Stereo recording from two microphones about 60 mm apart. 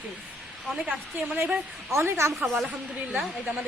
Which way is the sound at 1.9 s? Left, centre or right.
Right.